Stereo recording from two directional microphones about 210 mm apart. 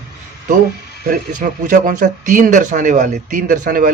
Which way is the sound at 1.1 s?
40° right (ahead or behind).